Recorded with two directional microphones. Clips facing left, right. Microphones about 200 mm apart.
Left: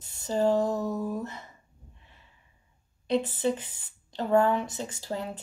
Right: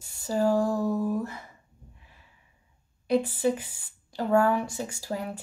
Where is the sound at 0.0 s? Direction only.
10° right (ahead or behind).